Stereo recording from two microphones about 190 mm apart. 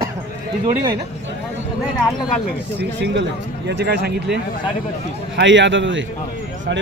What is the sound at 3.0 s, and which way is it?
Speech, 65° right (ahead or behind).